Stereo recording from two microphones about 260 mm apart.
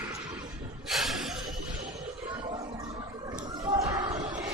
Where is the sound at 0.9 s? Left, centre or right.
Centre.